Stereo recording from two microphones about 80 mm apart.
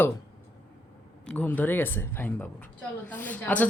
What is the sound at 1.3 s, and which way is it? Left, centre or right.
Speech, left.